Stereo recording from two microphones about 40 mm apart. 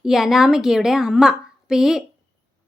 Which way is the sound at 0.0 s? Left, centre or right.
Centre.